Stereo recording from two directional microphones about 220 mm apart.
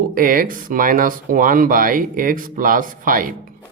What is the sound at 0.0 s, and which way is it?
Speech, 40° right (ahead or behind).